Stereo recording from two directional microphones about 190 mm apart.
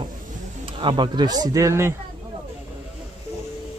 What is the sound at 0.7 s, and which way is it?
Speech, 25° right (ahead or behind).